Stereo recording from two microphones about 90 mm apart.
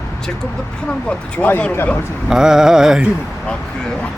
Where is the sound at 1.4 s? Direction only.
20° left (ahead or behind).